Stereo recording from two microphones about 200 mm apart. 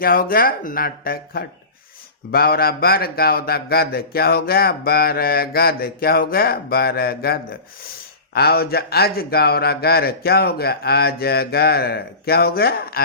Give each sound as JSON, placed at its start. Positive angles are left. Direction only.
{"t": 0.0, "sound": "speech", "side_deg": 45}